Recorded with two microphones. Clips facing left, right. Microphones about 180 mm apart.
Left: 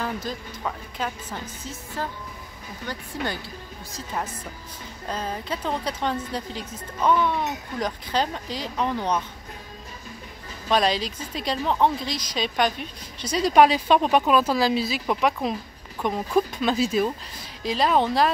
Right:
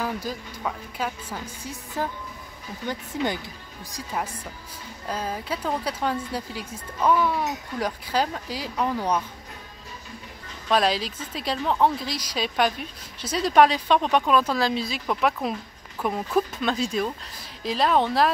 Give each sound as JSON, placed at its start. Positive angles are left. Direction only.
{"t": 0.0, "sound": "speech", "side_deg": -10}
{"t": 5.0, "sound": "speech", "side_deg": -5}
{"t": 10.7, "sound": "speech", "side_deg": -5}